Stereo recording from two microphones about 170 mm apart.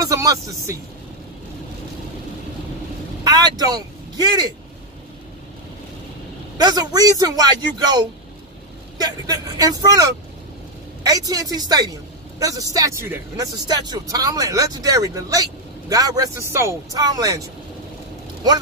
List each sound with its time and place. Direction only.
0.0 s speech: 20° right (ahead or behind)
3.3 s speech: 20° right (ahead or behind)
6.6 s speech: 25° right (ahead or behind)
9.0 s speech: 20° right (ahead or behind)